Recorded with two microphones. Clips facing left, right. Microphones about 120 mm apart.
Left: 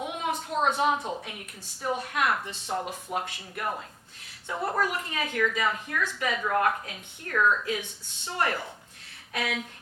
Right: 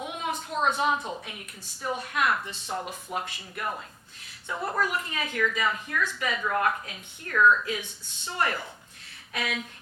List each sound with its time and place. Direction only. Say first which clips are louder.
0.0 s a sound: left 2 dB; 50° left (ahead or behind)
0.9 s a woman's voice: left 1 dB; 30° left (ahead or behind)
1.2 s a woman's voice: left 1 dB; 45° left (ahead or behind)
4.4 s a woman's voice: left 1 dB; 35° left (ahead or behind)
7.7 s a woman's voice: left 2 dB; 50° left (ahead or behind)